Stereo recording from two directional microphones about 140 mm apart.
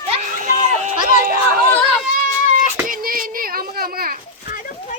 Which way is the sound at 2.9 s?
90° right.